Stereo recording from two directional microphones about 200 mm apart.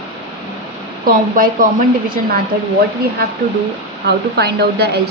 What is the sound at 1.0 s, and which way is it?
Speech, 45° right (ahead or behind).